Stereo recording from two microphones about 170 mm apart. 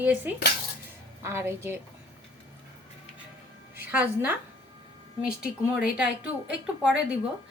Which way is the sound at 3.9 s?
10° right (ahead or behind).